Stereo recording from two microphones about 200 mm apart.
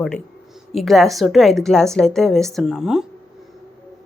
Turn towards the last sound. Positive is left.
turn(degrees=-5)  # may be behind; listen again after turning